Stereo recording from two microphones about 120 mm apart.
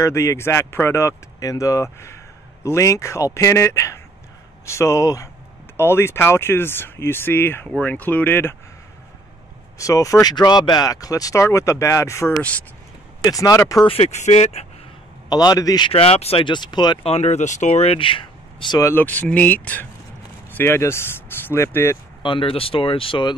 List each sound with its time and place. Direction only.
0.0 s speech: 25° left (ahead or behind)
9.8 s speech: 25° left (ahead or behind)
12.4 s speech: 10° left (ahead or behind)
13.2 s speech: 30° left (ahead or behind)
13.8 s speech: 55° left (ahead or behind)
15.2 s a man's voice: 35° left (ahead or behind)
15.9 s speech: 55° left (ahead or behind)
16.4 s a man's voice: 40° left (ahead or behind)
17.0 s speech: 60° left (ahead or behind); by 18.8 s 45° left (ahead or behind)
18.8 s speech: 20° left (ahead or behind)
22.2 s speech: 45° left (ahead or behind)